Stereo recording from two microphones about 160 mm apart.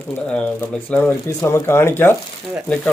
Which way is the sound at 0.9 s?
10° left (ahead or behind).